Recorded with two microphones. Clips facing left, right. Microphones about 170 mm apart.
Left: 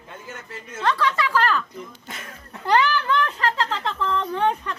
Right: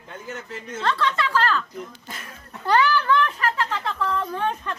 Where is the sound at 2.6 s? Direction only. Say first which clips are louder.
Right 1 dB; 15° left (ahead or behind).